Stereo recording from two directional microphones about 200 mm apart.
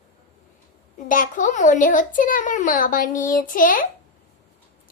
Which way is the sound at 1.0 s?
40° left (ahead or behind).